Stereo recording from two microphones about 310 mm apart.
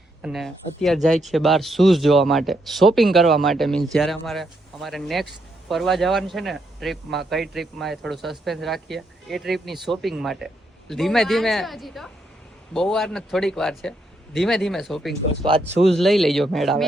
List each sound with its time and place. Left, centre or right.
0.2 s a man's voice: centre
15.4 s speech: centre
15.8 s a man's voice: centre